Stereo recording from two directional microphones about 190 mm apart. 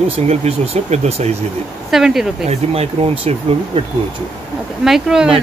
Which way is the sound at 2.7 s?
35° right (ahead or behind).